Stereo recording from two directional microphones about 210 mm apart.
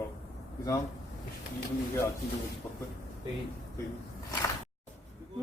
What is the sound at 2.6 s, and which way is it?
Speech, 10° left (ahead or behind).